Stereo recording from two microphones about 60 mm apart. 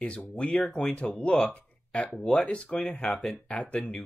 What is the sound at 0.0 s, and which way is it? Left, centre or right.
Speech, centre.